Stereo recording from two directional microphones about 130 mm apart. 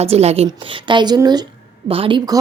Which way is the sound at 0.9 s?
35° right (ahead or behind).